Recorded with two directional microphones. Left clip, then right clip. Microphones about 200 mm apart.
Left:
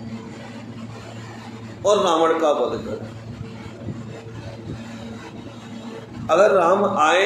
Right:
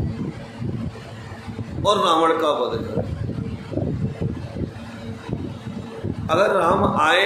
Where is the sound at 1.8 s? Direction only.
15° right (ahead or behind).